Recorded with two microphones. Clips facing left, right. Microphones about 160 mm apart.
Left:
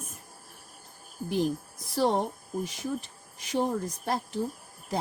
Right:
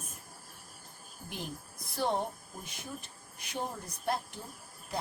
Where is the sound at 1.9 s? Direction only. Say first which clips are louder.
Left 6 dB; 90° left.